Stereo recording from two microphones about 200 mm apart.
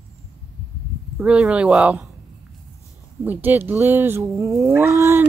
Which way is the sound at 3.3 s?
10° right (ahead or behind).